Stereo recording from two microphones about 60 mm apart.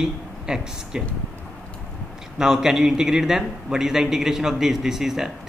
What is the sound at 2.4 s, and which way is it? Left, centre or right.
A man's voice, centre.